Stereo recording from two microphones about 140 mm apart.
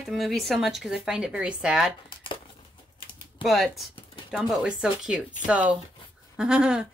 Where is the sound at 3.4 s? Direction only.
Centre (ahead or behind).